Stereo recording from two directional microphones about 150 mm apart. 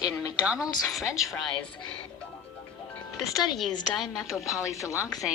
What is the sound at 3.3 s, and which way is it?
Speech, 25° left (ahead or behind).